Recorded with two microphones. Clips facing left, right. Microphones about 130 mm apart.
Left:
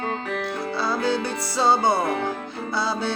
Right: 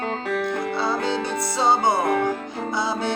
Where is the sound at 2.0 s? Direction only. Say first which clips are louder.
Right 3 dB; 50° right (ahead or behind).